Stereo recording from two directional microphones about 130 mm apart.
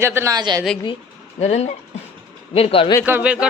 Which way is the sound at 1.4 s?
60° left (ahead or behind).